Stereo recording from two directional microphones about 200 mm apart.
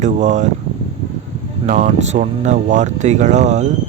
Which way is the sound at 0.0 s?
35° right (ahead or behind).